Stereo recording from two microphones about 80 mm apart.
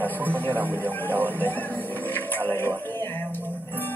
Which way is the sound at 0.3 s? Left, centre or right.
Left.